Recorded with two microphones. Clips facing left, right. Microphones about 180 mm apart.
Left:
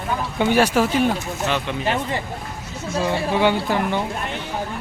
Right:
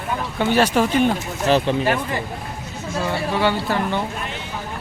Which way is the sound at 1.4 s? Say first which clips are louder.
Right 8 dB; 35° right (ahead or behind).